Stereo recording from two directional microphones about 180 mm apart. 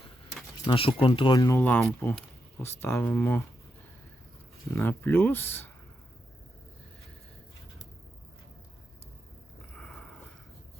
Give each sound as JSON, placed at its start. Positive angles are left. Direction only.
{"t": 0.7, "sound": "speech", "side_deg": 30}
{"t": 4.7, "sound": "speech", "side_deg": 15}
{"t": 9.7, "sound": "a sound", "side_deg": 5}